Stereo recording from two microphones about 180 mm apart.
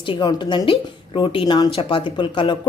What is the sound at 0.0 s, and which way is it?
Speech, 25° left (ahead or behind).